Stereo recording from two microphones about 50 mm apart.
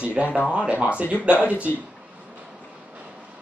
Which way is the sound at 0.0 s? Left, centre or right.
Right.